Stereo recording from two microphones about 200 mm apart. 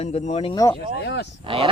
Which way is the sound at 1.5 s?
25° right (ahead or behind).